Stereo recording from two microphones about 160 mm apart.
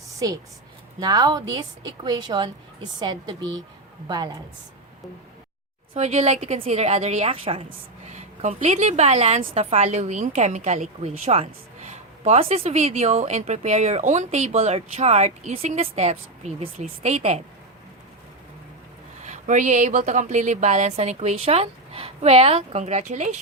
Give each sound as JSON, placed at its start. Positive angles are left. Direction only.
{"t": 0.2, "sound": "a woman's voice", "side_deg": -20}
{"t": 5.9, "sound": "a woman's voice", "side_deg": -45}
{"t": 19.2, "sound": "a woman's voice", "side_deg": -50}